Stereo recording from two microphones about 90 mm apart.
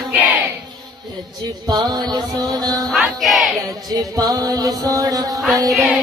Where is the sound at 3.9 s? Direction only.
45° right (ahead or behind).